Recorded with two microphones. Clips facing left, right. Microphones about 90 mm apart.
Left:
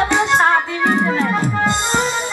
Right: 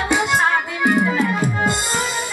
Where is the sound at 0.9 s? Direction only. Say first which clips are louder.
Right 1 dB; 30° left (ahead or behind).